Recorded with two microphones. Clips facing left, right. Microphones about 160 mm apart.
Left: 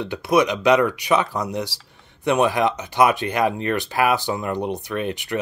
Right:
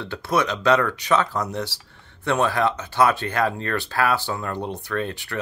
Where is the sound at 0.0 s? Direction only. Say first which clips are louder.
Left 4 dB; 15° left (ahead or behind).